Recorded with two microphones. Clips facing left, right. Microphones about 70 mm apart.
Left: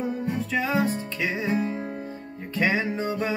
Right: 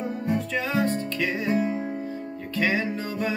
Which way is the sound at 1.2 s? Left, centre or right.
Centre.